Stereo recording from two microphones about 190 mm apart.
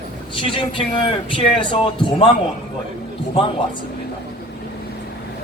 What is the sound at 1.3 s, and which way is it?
Speech, 25° left (ahead or behind).